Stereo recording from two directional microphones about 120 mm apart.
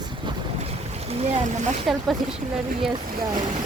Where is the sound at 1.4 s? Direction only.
85° right.